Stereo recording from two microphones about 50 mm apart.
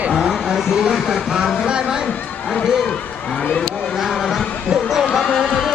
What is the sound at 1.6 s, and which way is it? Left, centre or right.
Music, centre.